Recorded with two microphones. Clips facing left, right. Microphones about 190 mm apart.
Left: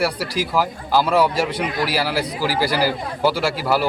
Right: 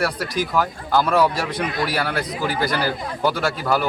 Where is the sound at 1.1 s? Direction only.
25° left (ahead or behind).